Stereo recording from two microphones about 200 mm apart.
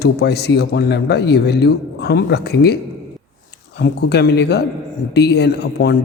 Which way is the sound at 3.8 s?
55° left (ahead or behind).